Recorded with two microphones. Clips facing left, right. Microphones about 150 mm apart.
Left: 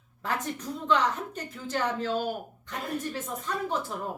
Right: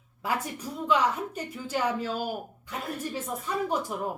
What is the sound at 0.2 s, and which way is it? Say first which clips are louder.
A woman's voice: right 1 dB; 10° right (ahead or behind).